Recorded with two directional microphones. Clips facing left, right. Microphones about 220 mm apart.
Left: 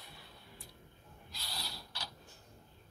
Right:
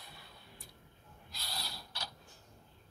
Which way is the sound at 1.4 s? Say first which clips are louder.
Right 2 dB; 45° right (ahead or behind).